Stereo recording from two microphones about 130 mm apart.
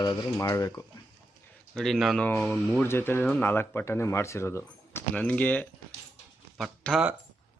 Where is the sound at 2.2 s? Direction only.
15° left (ahead or behind).